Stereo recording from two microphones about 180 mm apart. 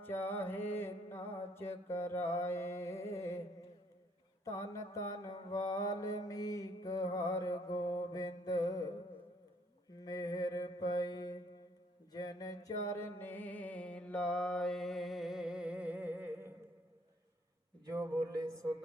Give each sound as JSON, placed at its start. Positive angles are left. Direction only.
{"t": 0.0, "sound": "music", "side_deg": 10}
{"t": 4.4, "sound": "mantra", "side_deg": 15}
{"t": 10.0, "sound": "mantra", "side_deg": 20}
{"t": 12.1, "sound": "music", "side_deg": 20}
{"t": 17.9, "sound": "a sound", "side_deg": -20}